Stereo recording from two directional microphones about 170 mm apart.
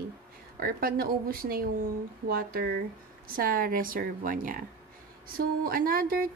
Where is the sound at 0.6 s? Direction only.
60° right (ahead or behind).